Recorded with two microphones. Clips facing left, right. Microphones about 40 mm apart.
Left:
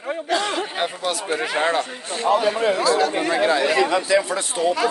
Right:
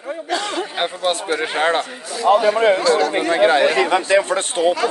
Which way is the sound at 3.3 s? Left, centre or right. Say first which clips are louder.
Right 7 dB; right.